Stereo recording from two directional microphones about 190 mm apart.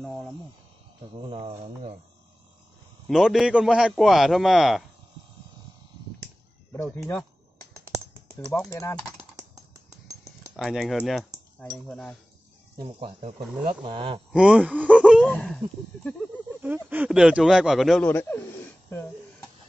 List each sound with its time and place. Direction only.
0.0 s a man's voice: centre (ahead or behind)
1.3 s speech: 30° right (ahead or behind)
3.1 s a man's voice: centre (ahead or behind)
7.0 s a man's voice: 5° left (ahead or behind)
8.5 s speech: 15° left (ahead or behind)
10.5 s a man's voice: centre (ahead or behind)
12.8 s speech: 30° right (ahead or behind)
14.3 s speech: 5° right (ahead or behind)
15.2 s a man's voice: 5° left (ahead or behind)
16.6 s a man's voice: 10° right (ahead or behind)